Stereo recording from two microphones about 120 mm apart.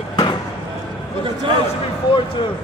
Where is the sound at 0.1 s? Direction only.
35° left (ahead or behind).